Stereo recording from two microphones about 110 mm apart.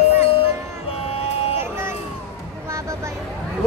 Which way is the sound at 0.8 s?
65° left (ahead or behind).